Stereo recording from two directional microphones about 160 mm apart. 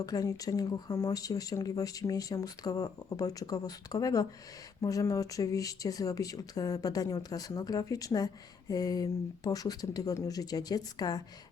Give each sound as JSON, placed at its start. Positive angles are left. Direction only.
{"t": 0.0, "sound": "speech", "side_deg": 20}